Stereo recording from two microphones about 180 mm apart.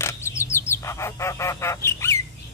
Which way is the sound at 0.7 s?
15° left (ahead or behind).